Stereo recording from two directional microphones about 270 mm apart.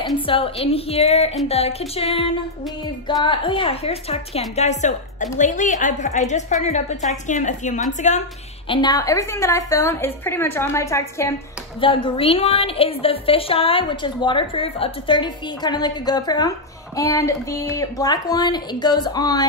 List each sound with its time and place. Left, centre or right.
0.3 s a woman's voice: centre
8.6 s a woman's voice: centre